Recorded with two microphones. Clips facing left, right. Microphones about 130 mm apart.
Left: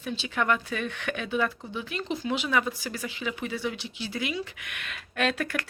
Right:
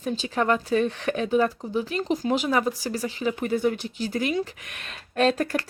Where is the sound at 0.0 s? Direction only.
40° right (ahead or behind).